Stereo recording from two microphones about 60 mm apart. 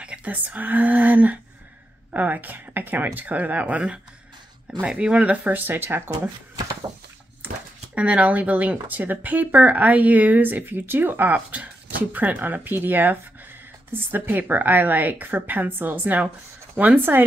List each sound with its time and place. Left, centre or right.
0.0 s a woman's voice: right
5.5 s a woman's voice: right
7.9 s a woman's voice: right